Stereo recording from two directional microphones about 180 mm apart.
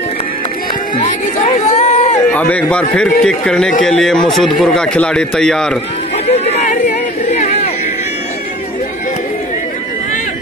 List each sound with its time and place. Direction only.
0.9 s speech: 40° left (ahead or behind)
2.3 s a man's voice: 10° left (ahead or behind)
6.1 s chatter: 35° left (ahead or behind)